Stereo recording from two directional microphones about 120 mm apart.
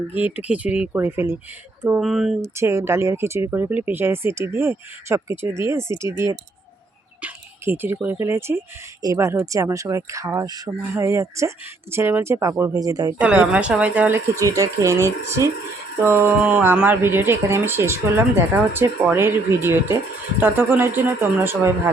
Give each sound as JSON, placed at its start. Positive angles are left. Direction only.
{"t": 0.1, "sound": "speech", "side_deg": -15}
{"t": 2.0, "sound": "speech", "side_deg": -5}
{"t": 2.4, "sound": "speech", "side_deg": -25}
{"t": 7.2, "sound": "a sound", "side_deg": -15}
{"t": 8.0, "sound": "speech", "side_deg": -20}
{"t": 13.1, "sound": "speech", "side_deg": -10}
{"t": 14.3, "sound": "speech", "side_deg": -25}
{"t": 16.0, "sound": "speech", "side_deg": -15}